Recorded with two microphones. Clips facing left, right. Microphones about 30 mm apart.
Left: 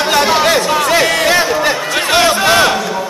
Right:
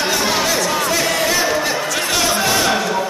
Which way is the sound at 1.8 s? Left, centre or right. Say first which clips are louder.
Left 6 dB; left.